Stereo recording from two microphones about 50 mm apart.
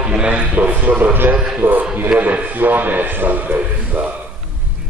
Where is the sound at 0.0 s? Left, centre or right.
Centre.